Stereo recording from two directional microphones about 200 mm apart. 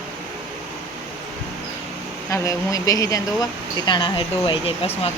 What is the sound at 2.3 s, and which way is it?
Speech, 15° left (ahead or behind).